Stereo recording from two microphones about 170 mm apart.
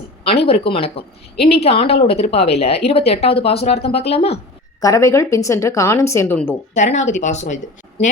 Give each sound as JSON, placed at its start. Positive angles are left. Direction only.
{"t": 0.3, "sound": "a woman's voice", "side_deg": 35}
{"t": 4.8, "sound": "speech", "side_deg": 20}
{"t": 6.7, "sound": "speech", "side_deg": 45}